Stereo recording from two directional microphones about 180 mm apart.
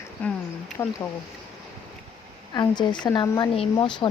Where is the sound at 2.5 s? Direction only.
25° left (ahead or behind).